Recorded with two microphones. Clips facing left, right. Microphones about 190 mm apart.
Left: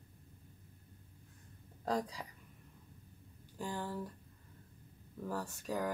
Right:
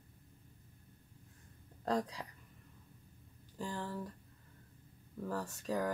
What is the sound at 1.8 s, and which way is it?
Speech, 5° left (ahead or behind).